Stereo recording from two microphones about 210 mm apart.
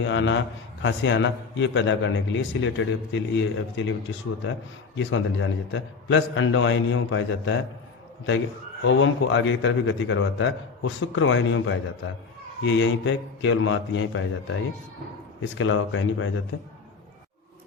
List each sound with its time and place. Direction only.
0.0 s a man's voice: 60° left (ahead or behind)
4.9 s a man's voice: 65° left (ahead or behind)
8.8 s a man's voice: 65° left (ahead or behind)
15.4 s speech: 70° left (ahead or behind)